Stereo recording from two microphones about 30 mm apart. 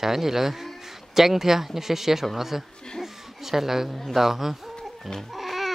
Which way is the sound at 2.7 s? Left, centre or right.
Left.